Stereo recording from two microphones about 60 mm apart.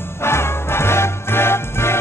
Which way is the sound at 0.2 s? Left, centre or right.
Left.